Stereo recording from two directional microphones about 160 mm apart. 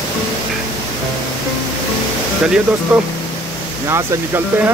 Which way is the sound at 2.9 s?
Centre (ahead or behind).